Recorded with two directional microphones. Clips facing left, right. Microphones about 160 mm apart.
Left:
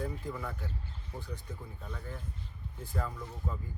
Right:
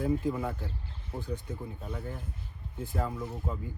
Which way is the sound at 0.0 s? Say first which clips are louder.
Right 8 dB; 20° right (ahead or behind).